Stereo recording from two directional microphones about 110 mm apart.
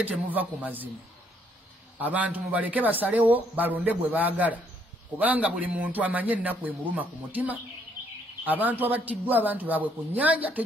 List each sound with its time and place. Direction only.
0.0 s a man's voice: 15° right (ahead or behind)
2.0 s a man's voice: 15° right (ahead or behind)